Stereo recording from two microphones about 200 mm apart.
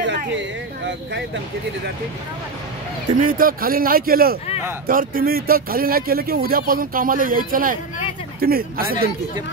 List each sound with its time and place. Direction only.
3.2 s speech: 45° right (ahead or behind)